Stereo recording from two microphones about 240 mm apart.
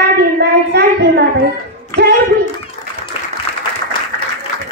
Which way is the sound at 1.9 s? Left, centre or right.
Right.